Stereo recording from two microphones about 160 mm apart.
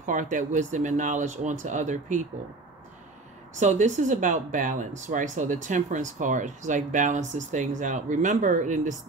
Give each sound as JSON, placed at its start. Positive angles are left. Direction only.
{"t": 0.0, "sound": "speech", "side_deg": -55}
{"t": 3.5, "sound": "speech", "side_deg": -50}